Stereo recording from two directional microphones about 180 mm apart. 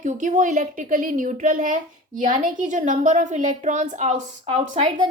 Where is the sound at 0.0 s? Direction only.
45° right (ahead or behind).